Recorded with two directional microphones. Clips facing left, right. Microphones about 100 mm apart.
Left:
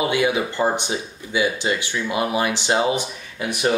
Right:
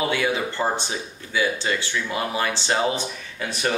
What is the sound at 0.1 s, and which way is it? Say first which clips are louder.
Speech: left 3 dB; 15° left (ahead or behind).